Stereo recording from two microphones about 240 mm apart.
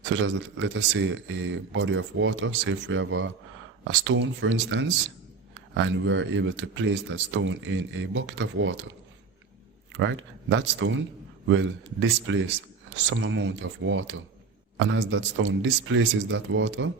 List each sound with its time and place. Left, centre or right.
0.0 s speech: right
9.9 s speech: right